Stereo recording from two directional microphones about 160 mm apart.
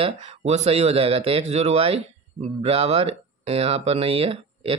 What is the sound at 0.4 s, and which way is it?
Speech, 45° right (ahead or behind).